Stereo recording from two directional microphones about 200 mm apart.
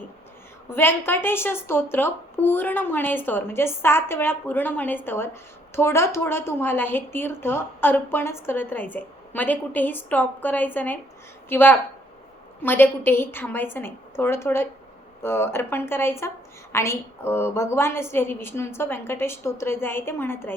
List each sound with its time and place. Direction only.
0.7 s a woman's voice: 10° left (ahead or behind)